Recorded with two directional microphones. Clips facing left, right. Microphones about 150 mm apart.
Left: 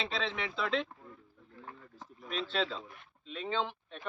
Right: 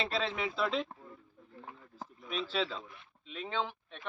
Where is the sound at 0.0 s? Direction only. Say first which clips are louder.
Right 2 dB; 5° right (ahead or behind).